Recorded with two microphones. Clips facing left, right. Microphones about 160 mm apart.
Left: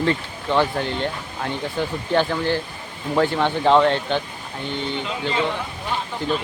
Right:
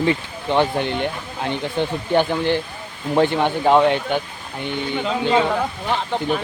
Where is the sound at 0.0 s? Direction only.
15° right (ahead or behind).